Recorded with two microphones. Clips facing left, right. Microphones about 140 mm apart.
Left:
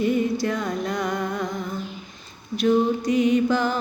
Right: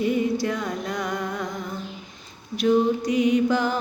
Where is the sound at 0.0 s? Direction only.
5° right (ahead or behind).